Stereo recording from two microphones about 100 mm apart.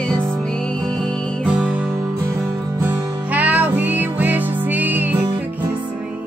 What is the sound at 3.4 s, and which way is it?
Music, 15° right (ahead or behind).